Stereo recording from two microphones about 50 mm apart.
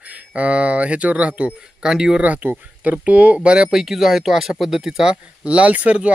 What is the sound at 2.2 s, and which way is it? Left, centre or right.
Speech, right.